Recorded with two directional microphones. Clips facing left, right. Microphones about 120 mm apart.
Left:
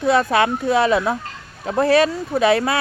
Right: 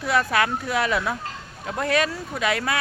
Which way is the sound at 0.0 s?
25° left (ahead or behind).